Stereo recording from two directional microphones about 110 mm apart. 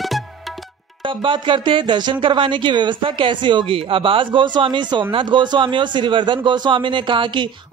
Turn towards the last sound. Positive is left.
turn(degrees=-50)  # may be behind; listen again after turning